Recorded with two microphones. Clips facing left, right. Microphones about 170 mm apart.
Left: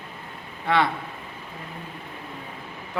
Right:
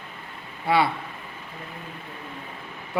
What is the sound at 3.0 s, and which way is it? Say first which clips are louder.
Speech: right 3 dB; 10° right (ahead or behind).